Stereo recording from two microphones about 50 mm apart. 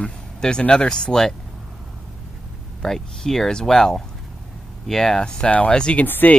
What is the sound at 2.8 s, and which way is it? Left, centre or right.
Speech, centre.